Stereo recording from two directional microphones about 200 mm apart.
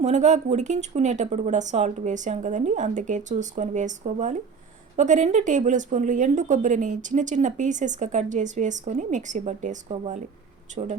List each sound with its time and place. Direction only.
0.0 s speech: 35° right (ahead or behind)